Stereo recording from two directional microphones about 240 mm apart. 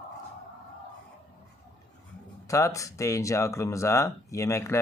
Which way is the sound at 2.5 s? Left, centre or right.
Centre.